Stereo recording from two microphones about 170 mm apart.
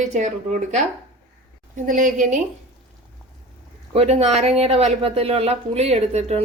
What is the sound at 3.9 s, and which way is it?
Speech, 40° right (ahead or behind).